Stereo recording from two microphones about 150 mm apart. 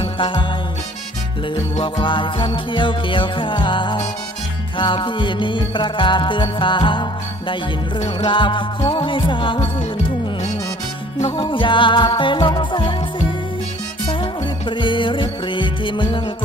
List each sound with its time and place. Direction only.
0.0 s music: 35° left (ahead or behind)
1.7 s music: 35° left (ahead or behind)
7.9 s music: 50° left (ahead or behind)
8.3 s music: 35° left (ahead or behind)
11.2 s music: 40° left (ahead or behind)
14.7 s music: 30° left (ahead or behind)